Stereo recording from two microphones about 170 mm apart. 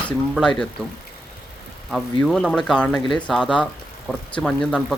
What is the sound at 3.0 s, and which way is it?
Speech, 25° left (ahead or behind).